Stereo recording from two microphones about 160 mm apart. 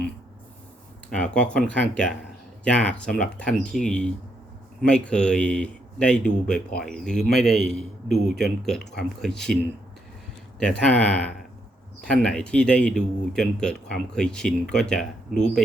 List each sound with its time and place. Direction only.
1.1 s speech: 5° left (ahead or behind)
10.6 s speech: 5° left (ahead or behind)
12.0 s speech: 5° left (ahead or behind)